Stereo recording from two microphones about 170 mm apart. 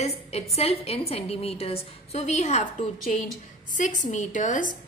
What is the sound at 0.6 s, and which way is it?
A woman's voice, 35° left (ahead or behind).